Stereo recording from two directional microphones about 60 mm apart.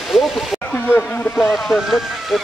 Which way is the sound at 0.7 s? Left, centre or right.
Left.